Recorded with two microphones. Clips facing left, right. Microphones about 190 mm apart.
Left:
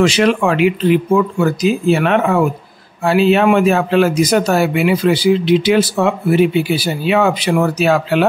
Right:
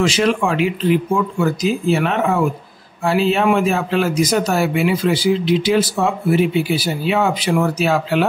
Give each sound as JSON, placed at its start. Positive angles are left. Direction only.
{"t": 0.0, "sound": "a man's voice", "side_deg": 65}